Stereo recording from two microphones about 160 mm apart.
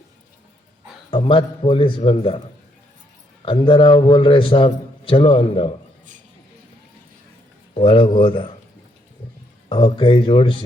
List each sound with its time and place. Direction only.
1.1 s a man's voice: 30° left (ahead or behind)
3.4 s a man's voice: 30° left (ahead or behind)
7.7 s a man's voice: 30° left (ahead or behind)
9.6 s a man's voice: 30° left (ahead or behind)